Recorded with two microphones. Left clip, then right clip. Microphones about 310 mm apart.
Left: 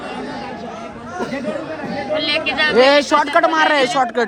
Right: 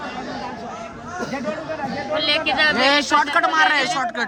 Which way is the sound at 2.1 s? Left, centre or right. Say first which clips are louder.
Left 1 dB; right.